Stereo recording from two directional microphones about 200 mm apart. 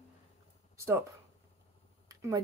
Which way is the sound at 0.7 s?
15° right (ahead or behind).